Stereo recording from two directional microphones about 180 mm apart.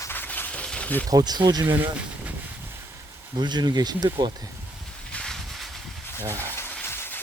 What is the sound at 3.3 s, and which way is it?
Speech, 25° right (ahead or behind).